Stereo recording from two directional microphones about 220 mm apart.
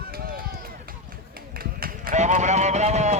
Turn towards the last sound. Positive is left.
turn(degrees=-30)  # may be behind; listen again after turning